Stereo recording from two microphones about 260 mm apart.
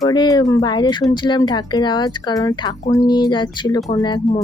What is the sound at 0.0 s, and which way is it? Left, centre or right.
Speech, centre.